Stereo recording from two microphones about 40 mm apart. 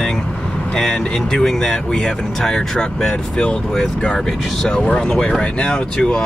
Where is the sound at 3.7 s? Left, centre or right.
Left.